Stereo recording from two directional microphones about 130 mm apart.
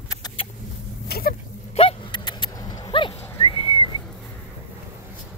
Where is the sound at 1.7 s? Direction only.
45° left (ahead or behind).